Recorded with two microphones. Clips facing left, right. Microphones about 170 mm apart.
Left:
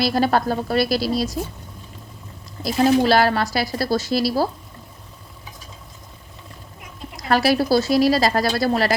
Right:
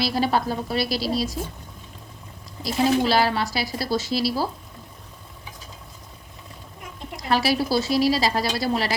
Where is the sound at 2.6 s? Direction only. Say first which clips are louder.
Left 4 dB; 45° left (ahead or behind).